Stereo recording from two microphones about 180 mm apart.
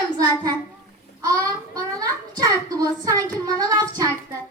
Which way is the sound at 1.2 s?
20° right (ahead or behind).